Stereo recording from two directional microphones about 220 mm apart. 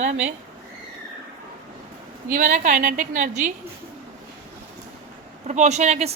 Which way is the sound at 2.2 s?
40° right (ahead or behind).